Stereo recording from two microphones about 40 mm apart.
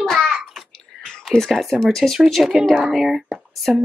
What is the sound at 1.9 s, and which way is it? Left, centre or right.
Speech, centre.